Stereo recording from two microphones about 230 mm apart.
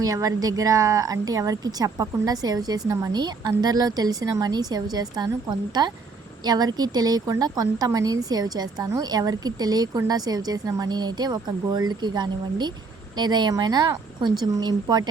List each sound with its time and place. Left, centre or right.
0.0 s a woman's voice: centre